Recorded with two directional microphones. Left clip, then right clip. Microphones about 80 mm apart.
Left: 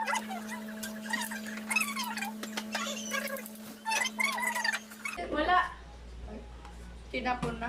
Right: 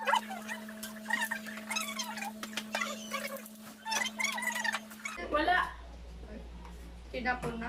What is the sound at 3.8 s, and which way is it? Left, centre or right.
Cat, centre.